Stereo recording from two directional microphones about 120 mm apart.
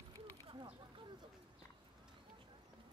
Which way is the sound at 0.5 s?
50° right (ahead or behind).